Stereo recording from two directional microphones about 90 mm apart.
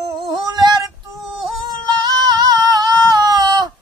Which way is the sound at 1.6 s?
50° right (ahead or behind).